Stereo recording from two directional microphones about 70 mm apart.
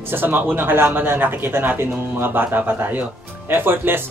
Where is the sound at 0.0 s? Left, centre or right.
Right.